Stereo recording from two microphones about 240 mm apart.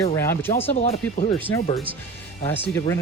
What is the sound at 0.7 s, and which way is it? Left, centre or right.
Speech, left.